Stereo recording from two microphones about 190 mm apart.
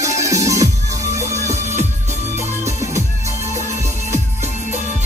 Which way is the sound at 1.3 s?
40° right (ahead or behind).